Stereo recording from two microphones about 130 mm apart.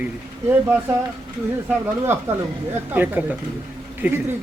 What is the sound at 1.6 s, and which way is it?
Speech, 20° right (ahead or behind).